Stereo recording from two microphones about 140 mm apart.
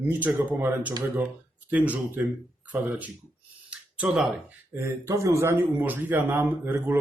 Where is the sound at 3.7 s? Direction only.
10° right (ahead or behind).